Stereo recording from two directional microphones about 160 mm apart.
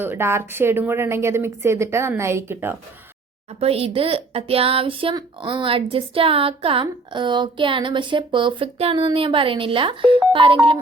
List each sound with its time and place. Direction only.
0.0 s a woman's voice: 15° right (ahead or behind)
3.6 s speech: 40° right (ahead or behind)